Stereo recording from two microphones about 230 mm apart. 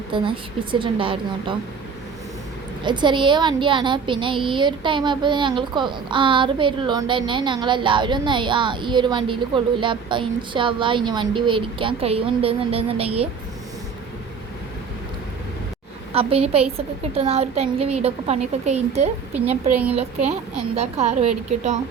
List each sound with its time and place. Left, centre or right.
0.1 s a woman's voice: right
2.8 s a woman's voice: centre
16.1 s a woman's voice: right
19.7 s a woman's voice: centre
20.0 s a woman's voice: right